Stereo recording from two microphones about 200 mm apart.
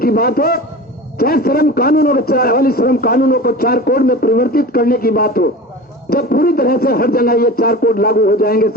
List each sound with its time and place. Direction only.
0.0 s a man's voice: 50° left (ahead or behind)